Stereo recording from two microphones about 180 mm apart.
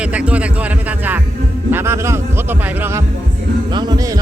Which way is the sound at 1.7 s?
15° right (ahead or behind).